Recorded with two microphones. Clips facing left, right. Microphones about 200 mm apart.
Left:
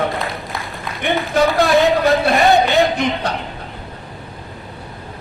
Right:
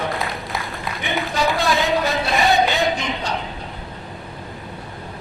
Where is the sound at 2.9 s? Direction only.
60° left (ahead or behind).